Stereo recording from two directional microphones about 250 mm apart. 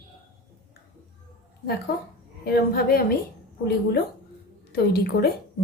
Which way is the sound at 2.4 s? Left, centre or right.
Left.